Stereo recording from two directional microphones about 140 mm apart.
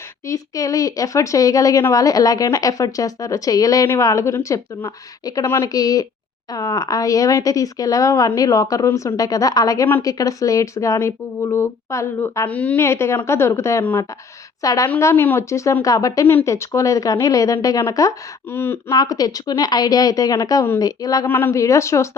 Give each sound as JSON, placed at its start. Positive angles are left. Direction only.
{"t": 0.3, "sound": "speech", "side_deg": 25}
{"t": 12.5, "sound": "a woman's voice", "side_deg": 10}
{"t": 18.9, "sound": "speech", "side_deg": 25}
{"t": 21.2, "sound": "speech", "side_deg": 15}